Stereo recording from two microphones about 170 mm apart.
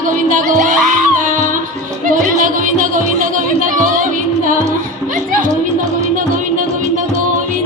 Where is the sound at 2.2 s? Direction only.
50° right (ahead or behind).